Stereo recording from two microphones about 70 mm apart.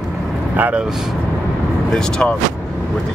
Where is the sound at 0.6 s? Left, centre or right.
Right.